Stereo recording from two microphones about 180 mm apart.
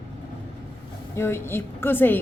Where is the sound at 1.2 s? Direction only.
15° left (ahead or behind).